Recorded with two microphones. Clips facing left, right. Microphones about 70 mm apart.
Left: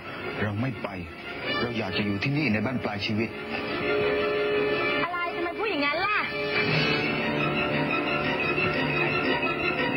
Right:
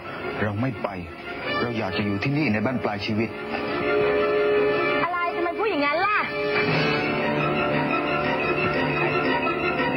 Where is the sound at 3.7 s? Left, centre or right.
Centre.